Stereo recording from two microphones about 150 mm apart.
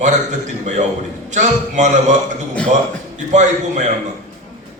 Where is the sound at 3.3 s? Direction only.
50° right (ahead or behind).